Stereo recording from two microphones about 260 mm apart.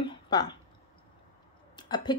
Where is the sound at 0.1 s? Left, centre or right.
Centre.